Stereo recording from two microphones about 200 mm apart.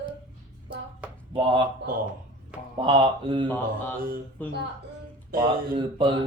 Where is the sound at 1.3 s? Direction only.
25° right (ahead or behind).